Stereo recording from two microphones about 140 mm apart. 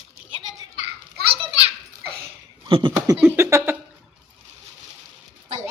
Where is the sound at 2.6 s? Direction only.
40° right (ahead or behind).